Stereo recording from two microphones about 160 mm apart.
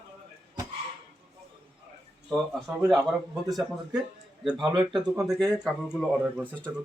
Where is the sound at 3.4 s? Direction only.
Centre (ahead or behind).